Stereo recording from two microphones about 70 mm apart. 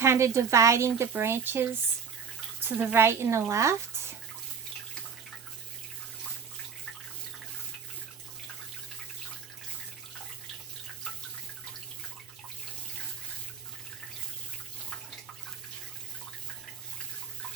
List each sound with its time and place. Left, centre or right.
0.0 s speech: right
2.6 s speech: right
2.9 s speech: right